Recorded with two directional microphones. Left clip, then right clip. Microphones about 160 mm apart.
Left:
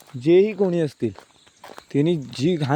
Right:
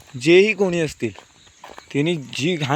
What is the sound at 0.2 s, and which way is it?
Speech, 10° left (ahead or behind).